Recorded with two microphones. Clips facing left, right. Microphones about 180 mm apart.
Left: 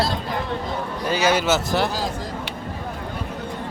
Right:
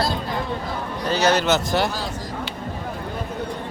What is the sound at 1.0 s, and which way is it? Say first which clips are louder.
Speech: right 1 dB; 10° left (ahead or behind).